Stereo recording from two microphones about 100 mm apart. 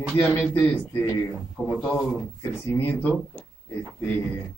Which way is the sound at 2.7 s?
20° left (ahead or behind).